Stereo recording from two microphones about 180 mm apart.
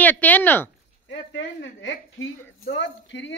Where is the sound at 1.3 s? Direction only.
90° left.